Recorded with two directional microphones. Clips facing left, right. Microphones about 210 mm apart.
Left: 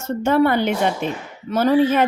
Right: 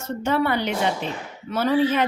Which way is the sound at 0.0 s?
45° left (ahead or behind).